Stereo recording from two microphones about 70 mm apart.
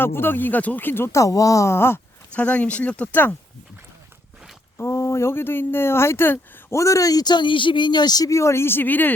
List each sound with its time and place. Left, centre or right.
0.0 s speech: left
1.1 s speech: left
2.3 s speech: centre
4.8 s speech: left
6.7 s speech: left
8.3 s speech: left